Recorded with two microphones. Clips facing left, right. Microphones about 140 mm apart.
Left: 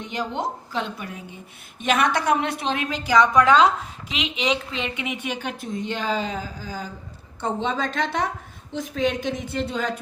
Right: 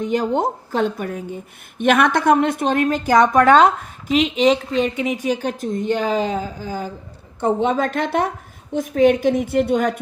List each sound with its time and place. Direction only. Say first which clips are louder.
0.0 s a woman's voice: right 8 dB; 45° right (ahead or behind); by 10.0 s 65° right (ahead or behind)